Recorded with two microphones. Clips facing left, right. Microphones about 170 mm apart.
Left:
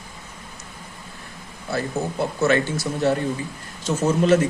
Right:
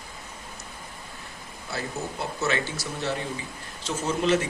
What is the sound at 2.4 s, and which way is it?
A man's voice, 50° left (ahead or behind).